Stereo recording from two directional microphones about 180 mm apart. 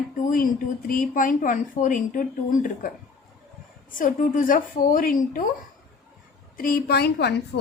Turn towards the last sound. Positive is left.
turn(degrees=65)  # may be behind; listen again after turning